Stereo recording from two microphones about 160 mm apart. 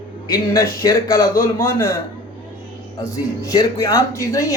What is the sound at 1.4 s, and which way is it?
Speech, 15° left (ahead or behind).